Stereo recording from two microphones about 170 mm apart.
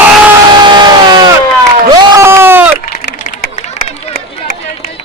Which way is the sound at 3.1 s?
50° left (ahead or behind).